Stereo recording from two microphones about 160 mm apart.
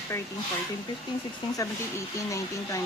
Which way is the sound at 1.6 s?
20° left (ahead or behind).